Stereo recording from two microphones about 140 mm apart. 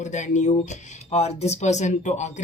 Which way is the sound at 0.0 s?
60° left (ahead or behind).